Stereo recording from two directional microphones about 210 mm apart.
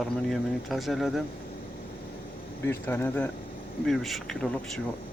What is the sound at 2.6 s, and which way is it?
Speech, 10° left (ahead or behind).